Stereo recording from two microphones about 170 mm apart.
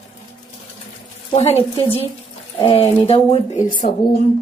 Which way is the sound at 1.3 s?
35° left (ahead or behind).